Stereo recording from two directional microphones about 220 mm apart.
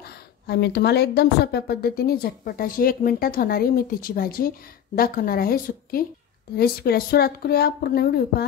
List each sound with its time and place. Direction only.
0.0 s a woman's voice: 45° left (ahead or behind)